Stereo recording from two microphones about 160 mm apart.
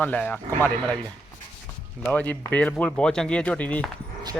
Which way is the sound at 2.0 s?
10° left (ahead or behind).